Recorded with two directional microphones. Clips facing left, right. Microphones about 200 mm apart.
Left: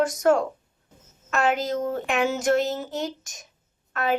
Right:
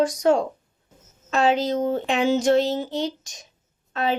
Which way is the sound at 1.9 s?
30° right (ahead or behind).